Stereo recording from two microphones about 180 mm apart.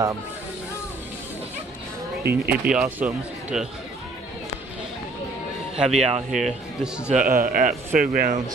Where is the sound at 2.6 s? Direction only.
5° right (ahead or behind).